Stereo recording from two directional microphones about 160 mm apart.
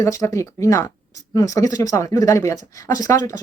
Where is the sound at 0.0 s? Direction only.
20° left (ahead or behind).